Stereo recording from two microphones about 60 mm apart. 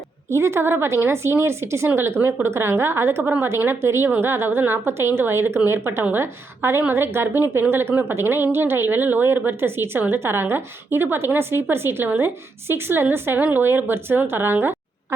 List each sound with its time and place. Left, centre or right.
0.3 s a woman's voice: right